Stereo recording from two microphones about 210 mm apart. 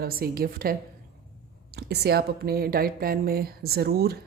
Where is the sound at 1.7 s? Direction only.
50° right (ahead or behind).